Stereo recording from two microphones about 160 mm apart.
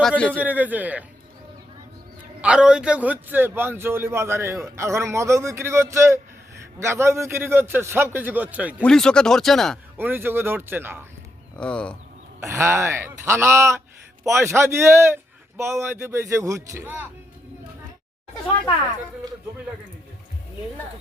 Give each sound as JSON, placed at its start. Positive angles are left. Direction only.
{"t": 0.3, "sound": "a man's voice", "side_deg": -10}
{"t": 2.4, "sound": "a man's voice", "side_deg": -5}
{"t": 8.8, "sound": "speech", "side_deg": 5}
{"t": 10.0, "sound": "a man's voice", "side_deg": -15}
{"t": 11.5, "sound": "speech", "side_deg": 5}
{"t": 12.4, "sound": "a man's voice", "side_deg": -15}